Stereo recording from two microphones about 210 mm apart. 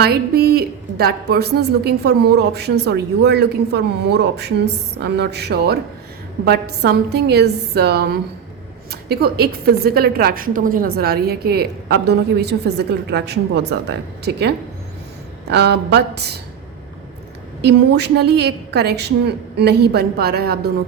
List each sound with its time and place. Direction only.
0.0 s a woman's voice: 50° right (ahead or behind)
17.6 s a woman's voice: 50° right (ahead or behind)